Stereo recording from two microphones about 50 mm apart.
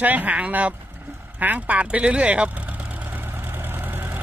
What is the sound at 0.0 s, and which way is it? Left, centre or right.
Speech, right.